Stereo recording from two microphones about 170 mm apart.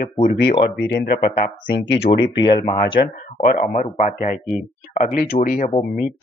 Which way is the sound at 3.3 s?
45° left (ahead or behind).